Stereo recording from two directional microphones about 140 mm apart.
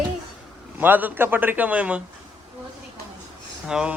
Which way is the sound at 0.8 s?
15° right (ahead or behind).